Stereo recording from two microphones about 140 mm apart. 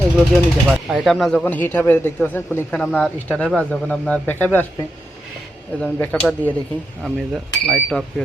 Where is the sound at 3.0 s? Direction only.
Centre (ahead or behind).